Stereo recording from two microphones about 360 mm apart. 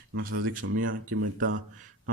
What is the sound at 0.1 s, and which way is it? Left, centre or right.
Speech, right.